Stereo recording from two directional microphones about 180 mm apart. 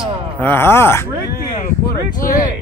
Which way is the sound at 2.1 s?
50° left (ahead or behind).